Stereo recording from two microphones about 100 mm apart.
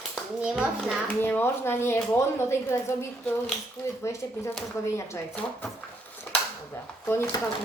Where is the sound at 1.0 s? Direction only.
20° left (ahead or behind).